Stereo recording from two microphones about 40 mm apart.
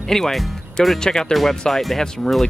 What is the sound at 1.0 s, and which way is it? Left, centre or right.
Speech, centre.